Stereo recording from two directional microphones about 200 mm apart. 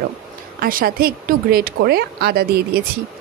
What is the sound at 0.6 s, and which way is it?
Speech, 45° right (ahead or behind).